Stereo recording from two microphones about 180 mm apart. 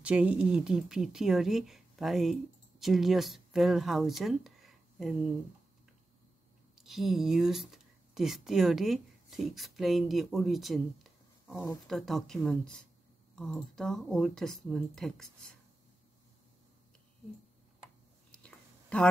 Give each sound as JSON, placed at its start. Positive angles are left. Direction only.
{"t": 0.0, "sound": "speech", "side_deg": -5}
{"t": 6.7, "sound": "speech", "side_deg": 0}
{"t": 11.5, "sound": "speech", "side_deg": 15}
{"t": 11.9, "sound": "speech", "side_deg": 0}
{"t": 18.3, "sound": "a sound", "side_deg": 5}